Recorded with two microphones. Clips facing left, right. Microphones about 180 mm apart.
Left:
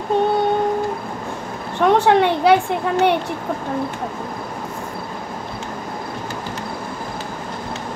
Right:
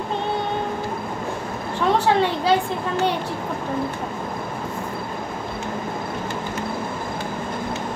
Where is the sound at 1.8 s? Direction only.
65° left (ahead or behind).